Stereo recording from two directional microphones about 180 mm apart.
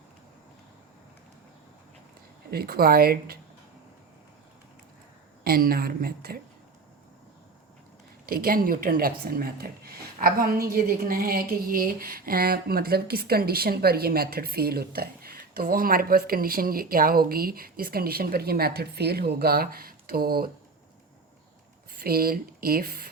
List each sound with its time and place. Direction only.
2.5 s speech: 55° right (ahead or behind)
5.4 s speech: 55° right (ahead or behind)
8.3 s speech: 50° right (ahead or behind)
21.9 s speech: 55° right (ahead or behind)